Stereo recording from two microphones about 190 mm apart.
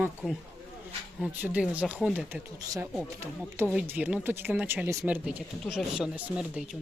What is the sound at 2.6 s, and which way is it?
Speech, 20° right (ahead or behind).